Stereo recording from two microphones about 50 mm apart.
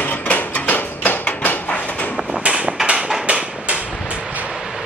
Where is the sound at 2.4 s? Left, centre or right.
Right.